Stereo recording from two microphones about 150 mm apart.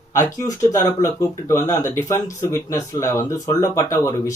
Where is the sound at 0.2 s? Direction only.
20° left (ahead or behind).